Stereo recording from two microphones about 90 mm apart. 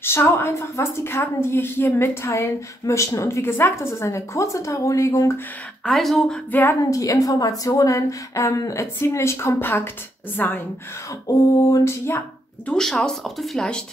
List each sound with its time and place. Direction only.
0.0 s a woman's voice: 25° left (ahead or behind)
5.9 s speech: 5° left (ahead or behind)
6.8 s a woman's voice: 40° left (ahead or behind); by 10.6 s 20° left (ahead or behind)
11.2 s a woman's voice: 35° left (ahead or behind)
12.6 s speech: 5° left (ahead or behind)